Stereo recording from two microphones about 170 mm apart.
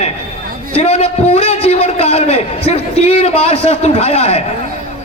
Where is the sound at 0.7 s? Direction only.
40° left (ahead or behind).